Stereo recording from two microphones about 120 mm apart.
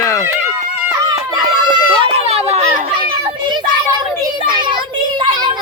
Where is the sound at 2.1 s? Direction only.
60° right (ahead or behind).